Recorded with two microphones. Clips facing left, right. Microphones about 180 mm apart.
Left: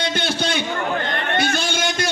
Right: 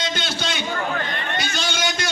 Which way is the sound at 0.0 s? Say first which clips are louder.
Left 4 dB; 55° left (ahead or behind).